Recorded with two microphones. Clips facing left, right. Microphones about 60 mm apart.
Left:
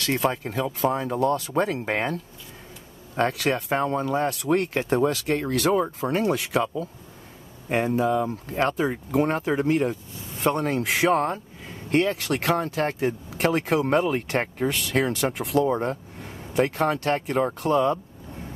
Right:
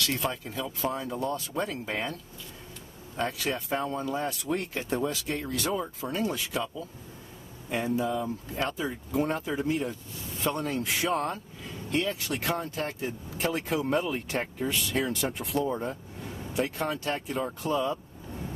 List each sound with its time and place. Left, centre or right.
0.2 s speech: left
3.2 s speech: left
10.8 s speech: left